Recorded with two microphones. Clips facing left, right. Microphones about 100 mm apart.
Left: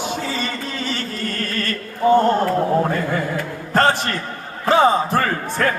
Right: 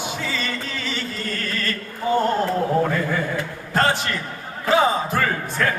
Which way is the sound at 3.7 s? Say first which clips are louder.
Left 3 dB; 45° left (ahead or behind).